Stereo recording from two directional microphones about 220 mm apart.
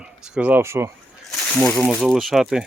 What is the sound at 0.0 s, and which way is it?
Speech, 5° right (ahead or behind).